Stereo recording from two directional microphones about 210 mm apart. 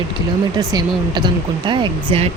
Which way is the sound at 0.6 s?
20° right (ahead or behind).